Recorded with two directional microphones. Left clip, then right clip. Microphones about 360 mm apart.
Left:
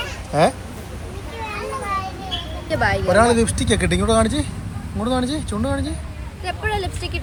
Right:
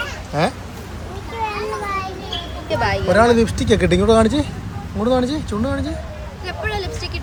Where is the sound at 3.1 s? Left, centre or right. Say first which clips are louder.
Right 3 dB; centre.